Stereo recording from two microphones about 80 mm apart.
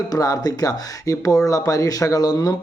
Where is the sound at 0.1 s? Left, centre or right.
Left.